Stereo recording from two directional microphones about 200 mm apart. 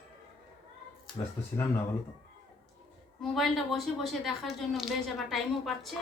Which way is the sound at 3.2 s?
Centre (ahead or behind).